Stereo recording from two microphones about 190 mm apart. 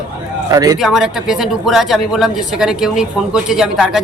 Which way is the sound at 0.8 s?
Centre (ahead or behind).